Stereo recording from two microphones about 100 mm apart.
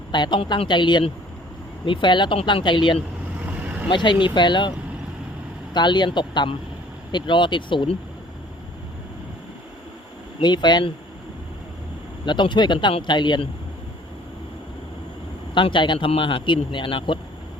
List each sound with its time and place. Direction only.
0.1 s speech: 50° left (ahead or behind)
3.6 s vehicle: 15° right (ahead or behind)
3.8 s speech: 50° left (ahead or behind)
5.7 s speech: 50° left (ahead or behind)
10.4 s speech: 45° left (ahead or behind)
12.2 s speech: 50° left (ahead or behind)
15.5 s speech: 55° left (ahead or behind)